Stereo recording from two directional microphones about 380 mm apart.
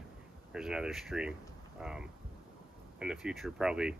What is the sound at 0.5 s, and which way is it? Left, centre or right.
Speech, centre.